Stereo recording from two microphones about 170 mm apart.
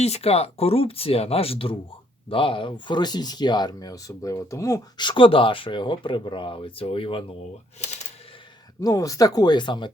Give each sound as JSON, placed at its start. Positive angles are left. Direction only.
{"t": 0.0, "sound": "speech", "side_deg": 40}
{"t": 8.8, "sound": "speech", "side_deg": 20}